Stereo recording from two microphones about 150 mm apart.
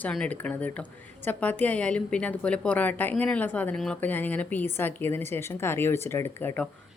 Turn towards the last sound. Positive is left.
turn(degrees=15)  # may be behind; listen again after turning